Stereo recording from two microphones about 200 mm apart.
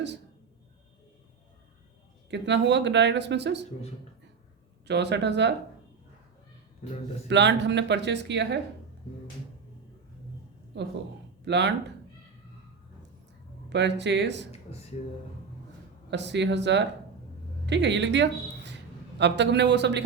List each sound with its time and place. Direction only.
2.3 s speech: 60° right (ahead or behind)
4.9 s speech: 60° right (ahead or behind)
7.3 s speech: 60° right (ahead or behind)
10.7 s speech: 60° right (ahead or behind)
13.7 s speech: 60° right (ahead or behind)
16.0 s speech: 60° right (ahead or behind)